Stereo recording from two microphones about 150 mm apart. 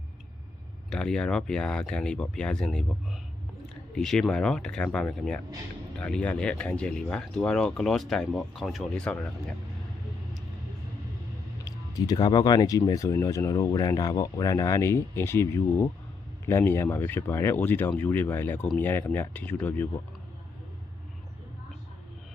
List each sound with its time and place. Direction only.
0.9 s speech: 5° left (ahead or behind)
11.6 s speech: 25° left (ahead or behind)